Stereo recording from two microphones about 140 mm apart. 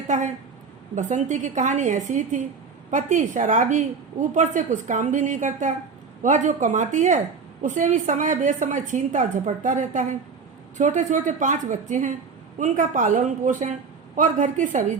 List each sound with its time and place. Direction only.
0.1 s a woman's voice: 60° right (ahead or behind)